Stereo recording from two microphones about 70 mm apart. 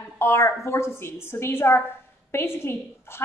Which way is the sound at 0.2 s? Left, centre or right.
Left.